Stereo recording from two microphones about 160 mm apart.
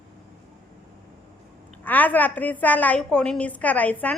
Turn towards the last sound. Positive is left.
turn(degrees=10)  # may be behind; listen again after turning